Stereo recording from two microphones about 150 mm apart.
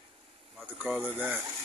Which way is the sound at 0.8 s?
10° right (ahead or behind).